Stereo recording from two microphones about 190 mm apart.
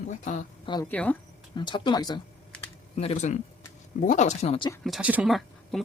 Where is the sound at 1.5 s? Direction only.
25° left (ahead or behind).